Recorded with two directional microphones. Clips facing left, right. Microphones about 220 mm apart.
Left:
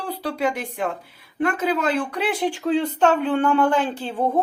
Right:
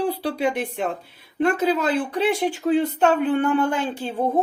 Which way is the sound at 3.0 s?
10° right (ahead or behind).